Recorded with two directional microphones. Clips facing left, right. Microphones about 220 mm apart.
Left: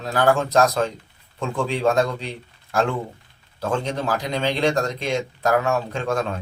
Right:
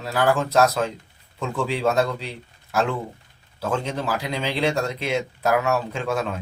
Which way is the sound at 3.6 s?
5° right (ahead or behind).